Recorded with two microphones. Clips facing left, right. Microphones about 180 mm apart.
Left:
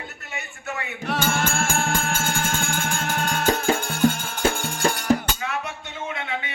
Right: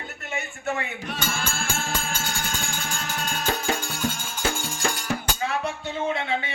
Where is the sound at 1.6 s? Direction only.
50° left (ahead or behind).